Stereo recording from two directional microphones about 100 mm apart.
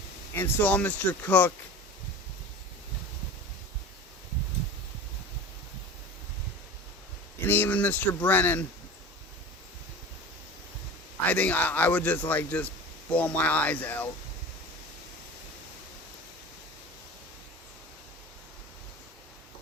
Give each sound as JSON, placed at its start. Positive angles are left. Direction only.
{"t": 0.3, "sound": "speech", "side_deg": 20}
{"t": 7.4, "sound": "speech", "side_deg": 20}
{"t": 11.3, "sound": "speech", "side_deg": 15}